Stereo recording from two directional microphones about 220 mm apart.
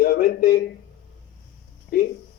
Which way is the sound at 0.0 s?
40° left (ahead or behind).